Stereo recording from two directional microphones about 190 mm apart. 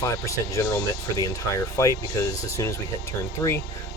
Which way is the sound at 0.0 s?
15° left (ahead or behind).